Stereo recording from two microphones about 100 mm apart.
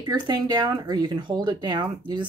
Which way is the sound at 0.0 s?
40° right (ahead or behind).